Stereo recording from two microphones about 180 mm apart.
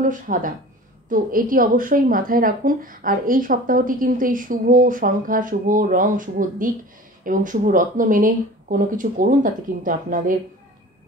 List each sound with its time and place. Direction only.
0.0 s a woman's voice: 50° right (ahead or behind)